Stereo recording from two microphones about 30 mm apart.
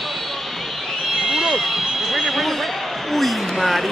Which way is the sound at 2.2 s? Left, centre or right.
Centre.